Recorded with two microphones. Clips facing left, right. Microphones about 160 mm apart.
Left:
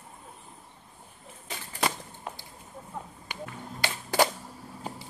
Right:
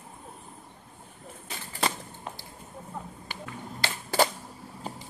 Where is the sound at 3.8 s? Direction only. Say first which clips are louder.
Even; 15° left (ahead or behind).